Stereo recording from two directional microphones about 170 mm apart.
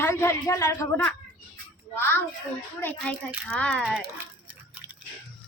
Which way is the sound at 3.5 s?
5° left (ahead or behind).